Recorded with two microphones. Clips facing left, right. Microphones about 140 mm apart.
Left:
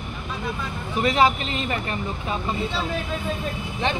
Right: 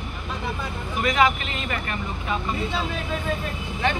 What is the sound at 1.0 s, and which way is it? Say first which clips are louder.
Speech: left 2 dB; 30° left (ahead or behind).